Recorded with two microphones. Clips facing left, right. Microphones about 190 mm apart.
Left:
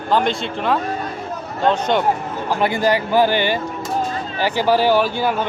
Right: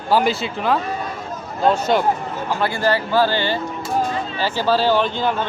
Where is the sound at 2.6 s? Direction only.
15° left (ahead or behind).